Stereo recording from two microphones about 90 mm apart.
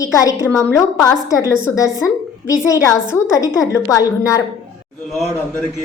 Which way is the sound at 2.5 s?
40° left (ahead or behind).